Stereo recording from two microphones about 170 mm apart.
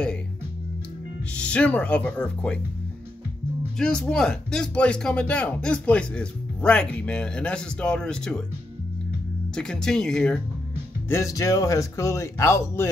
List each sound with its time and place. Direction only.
1.3 s speech: 5° left (ahead or behind)
3.7 s speech: 5° left (ahead or behind)
9.6 s speech: 5° left (ahead or behind)
11.1 s speech: 15° left (ahead or behind)